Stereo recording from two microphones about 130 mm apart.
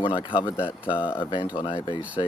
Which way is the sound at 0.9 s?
40° left (ahead or behind).